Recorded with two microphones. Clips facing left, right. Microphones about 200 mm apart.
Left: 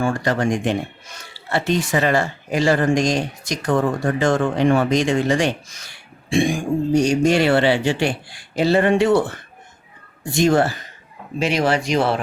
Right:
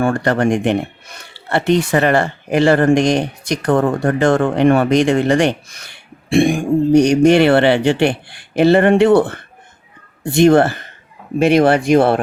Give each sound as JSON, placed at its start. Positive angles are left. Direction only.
{"t": 0.0, "sound": "speech", "side_deg": -60}